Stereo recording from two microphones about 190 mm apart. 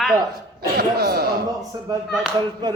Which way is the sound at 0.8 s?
55° right (ahead or behind).